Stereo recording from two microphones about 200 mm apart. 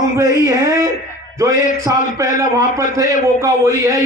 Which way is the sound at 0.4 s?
15° right (ahead or behind).